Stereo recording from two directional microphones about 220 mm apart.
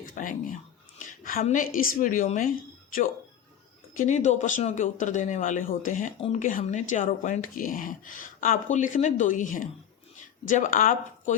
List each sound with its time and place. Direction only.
0.0 s a woman's voice: 40° left (ahead or behind)
6.1 s speech: 25° left (ahead or behind)
6.4 s speech: 35° left (ahead or behind)